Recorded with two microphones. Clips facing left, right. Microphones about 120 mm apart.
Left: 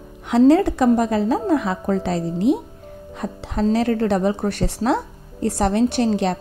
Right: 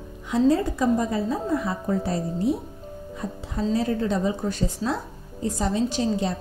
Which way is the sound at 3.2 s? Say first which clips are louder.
Left 6 dB; 75° left (ahead or behind).